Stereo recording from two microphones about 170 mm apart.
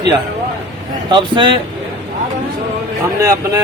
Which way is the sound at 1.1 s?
30° right (ahead or behind).